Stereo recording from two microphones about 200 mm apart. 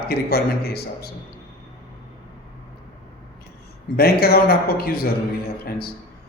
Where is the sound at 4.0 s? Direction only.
50° left (ahead or behind).